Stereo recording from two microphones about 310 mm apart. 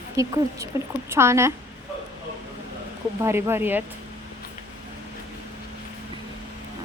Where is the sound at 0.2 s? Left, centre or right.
Centre.